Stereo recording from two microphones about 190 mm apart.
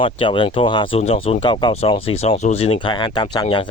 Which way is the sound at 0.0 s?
25° left (ahead or behind).